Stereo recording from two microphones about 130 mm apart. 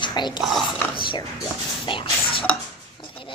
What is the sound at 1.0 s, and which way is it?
Speech, 40° left (ahead or behind).